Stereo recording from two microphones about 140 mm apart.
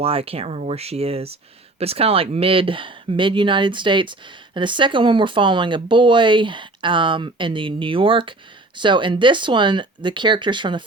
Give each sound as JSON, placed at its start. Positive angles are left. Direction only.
{"t": 0.0, "sound": "speech", "side_deg": -45}